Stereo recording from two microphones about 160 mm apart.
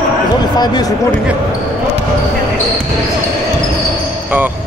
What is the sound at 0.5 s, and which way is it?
Speech, 25° left (ahead or behind).